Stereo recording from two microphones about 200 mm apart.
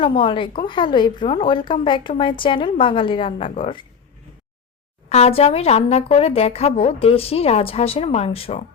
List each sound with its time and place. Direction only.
0.0 s a woman's voice: 25° left (ahead or behind)
5.0 s a woman's voice: 30° left (ahead or behind)